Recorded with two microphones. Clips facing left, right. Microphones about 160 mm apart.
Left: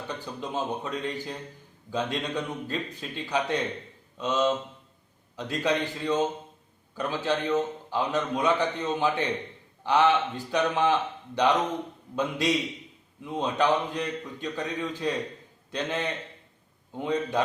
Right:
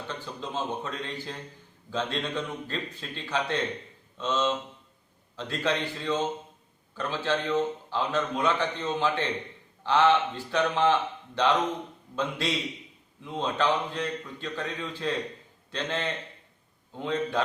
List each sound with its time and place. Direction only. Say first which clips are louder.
0.1 s a man's voice: left 2 dB; 15° left (ahead or behind)
12.1 s a man's voice: left 3 dB; 15° left (ahead or behind)